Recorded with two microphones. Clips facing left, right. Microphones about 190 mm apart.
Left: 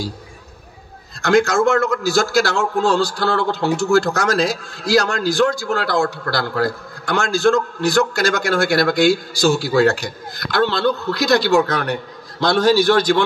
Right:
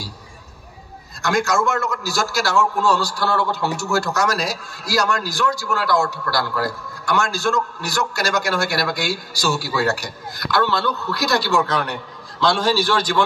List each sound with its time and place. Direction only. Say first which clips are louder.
1.2 s a man's voice: left 5 dB; 55° left (ahead or behind)
12.7 s a man's voice: left 6 dB; 55° left (ahead or behind)